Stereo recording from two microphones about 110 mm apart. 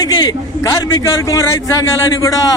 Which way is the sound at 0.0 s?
35° left (ahead or behind).